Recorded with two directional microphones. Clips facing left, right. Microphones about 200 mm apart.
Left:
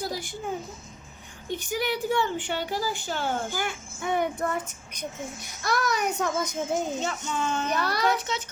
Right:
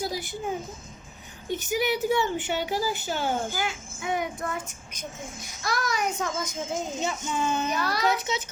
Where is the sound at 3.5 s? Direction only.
50° left (ahead or behind).